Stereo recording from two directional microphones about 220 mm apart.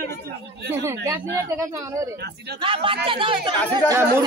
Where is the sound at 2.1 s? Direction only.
50° right (ahead or behind).